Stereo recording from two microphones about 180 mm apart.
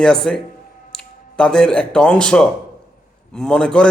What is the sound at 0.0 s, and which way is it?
A man's voice, 5° left (ahead or behind).